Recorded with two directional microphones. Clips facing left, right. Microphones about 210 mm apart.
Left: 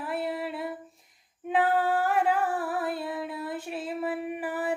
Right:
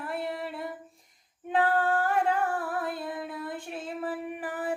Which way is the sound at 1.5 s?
5° left (ahead or behind).